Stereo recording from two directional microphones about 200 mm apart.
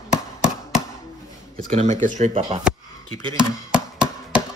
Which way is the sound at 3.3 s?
5° right (ahead or behind).